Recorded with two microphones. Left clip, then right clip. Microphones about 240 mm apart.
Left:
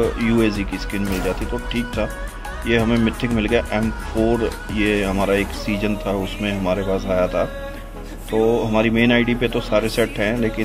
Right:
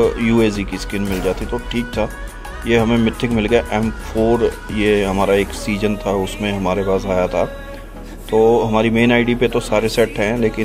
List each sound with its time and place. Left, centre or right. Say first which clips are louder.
0.0 s speech: right 4 dB; centre